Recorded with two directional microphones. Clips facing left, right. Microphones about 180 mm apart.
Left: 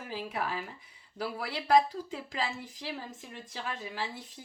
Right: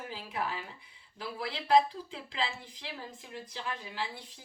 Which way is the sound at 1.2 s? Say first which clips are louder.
Left 3 dB; 45° left (ahead or behind).